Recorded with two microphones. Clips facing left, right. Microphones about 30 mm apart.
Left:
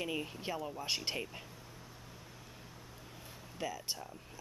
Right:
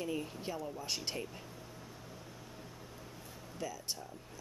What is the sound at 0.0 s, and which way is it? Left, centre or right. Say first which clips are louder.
Speech: even; left.